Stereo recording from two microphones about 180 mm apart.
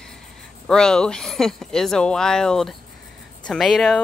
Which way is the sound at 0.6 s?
5° left (ahead or behind).